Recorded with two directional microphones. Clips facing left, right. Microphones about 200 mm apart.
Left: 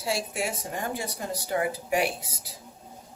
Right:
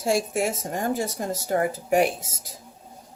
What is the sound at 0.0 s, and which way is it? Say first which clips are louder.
Speech: right 6 dB; 45° right (ahead or behind).